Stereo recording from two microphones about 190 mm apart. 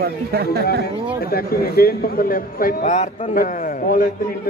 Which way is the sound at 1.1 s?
50° left (ahead or behind).